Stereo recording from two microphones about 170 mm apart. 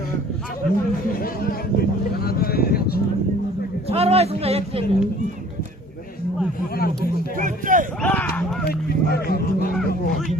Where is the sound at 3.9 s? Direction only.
35° right (ahead or behind).